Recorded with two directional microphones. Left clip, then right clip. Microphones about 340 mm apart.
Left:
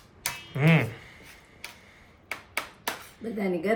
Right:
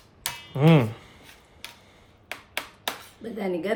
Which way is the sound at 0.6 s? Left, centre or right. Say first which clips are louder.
Right 4 dB; centre.